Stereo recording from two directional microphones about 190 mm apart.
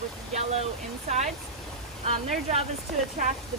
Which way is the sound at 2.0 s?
35° right (ahead or behind).